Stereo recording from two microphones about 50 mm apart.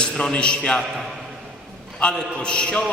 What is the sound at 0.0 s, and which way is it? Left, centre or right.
Speech, centre.